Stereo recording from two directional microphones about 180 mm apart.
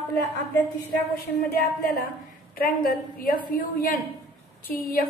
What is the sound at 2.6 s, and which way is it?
A woman's voice, 55° left (ahead or behind).